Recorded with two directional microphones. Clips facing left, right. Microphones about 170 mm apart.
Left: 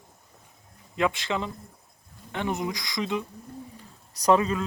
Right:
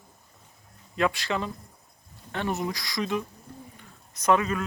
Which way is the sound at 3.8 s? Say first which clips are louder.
Left 2 dB; 35° left (ahead or behind).